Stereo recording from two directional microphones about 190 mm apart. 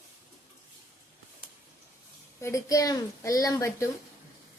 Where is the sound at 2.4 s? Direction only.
15° left (ahead or behind).